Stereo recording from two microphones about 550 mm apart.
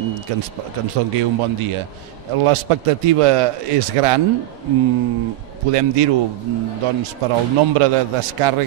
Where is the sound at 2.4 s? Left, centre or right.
Right.